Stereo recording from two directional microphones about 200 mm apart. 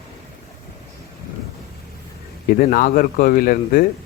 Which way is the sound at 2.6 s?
45° left (ahead or behind).